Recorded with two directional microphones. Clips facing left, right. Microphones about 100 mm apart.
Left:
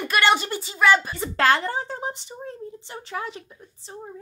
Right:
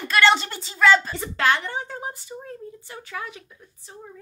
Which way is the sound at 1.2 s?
40° left (ahead or behind).